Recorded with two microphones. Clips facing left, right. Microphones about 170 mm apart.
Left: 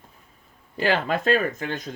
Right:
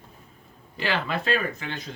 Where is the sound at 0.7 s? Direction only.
45° left (ahead or behind).